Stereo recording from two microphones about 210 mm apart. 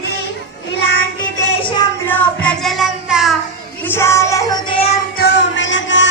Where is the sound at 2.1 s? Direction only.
5° left (ahead or behind).